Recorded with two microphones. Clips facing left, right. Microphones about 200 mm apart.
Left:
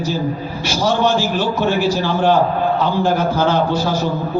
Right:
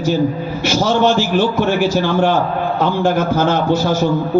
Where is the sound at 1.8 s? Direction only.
50° right (ahead or behind).